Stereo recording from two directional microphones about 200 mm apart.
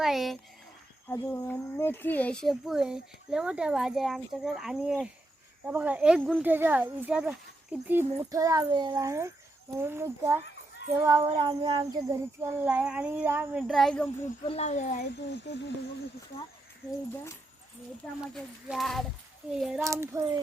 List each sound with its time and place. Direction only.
0.0 s speech: centre (ahead or behind)
1.1 s a child's voice: 10° left (ahead or behind)
14.4 s speech: 30° left (ahead or behind)
14.9 s speech: 55° left (ahead or behind)
18.3 s a child's voice: centre (ahead or behind)
19.8 s speech: 15° right (ahead or behind)